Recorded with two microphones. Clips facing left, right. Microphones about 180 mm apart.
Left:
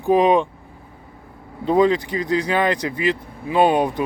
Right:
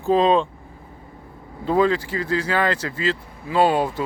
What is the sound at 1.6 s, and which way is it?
A man's voice, 20° left (ahead or behind).